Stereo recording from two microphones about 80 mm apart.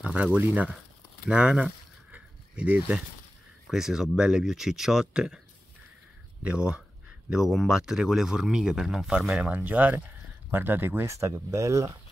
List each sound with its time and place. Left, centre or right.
0.0 s speech: centre
1.2 s a sound: centre
3.7 s speech: centre
6.4 s speech: centre
7.2 s speech: centre
9.2 s speech: centre; by 12.0 s right